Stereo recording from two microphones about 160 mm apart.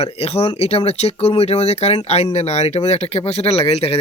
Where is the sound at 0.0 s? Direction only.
40° left (ahead or behind).